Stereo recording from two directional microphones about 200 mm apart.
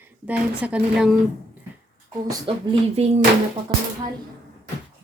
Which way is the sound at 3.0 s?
30° right (ahead or behind).